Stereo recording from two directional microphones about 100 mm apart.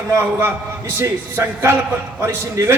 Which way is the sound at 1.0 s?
25° right (ahead or behind).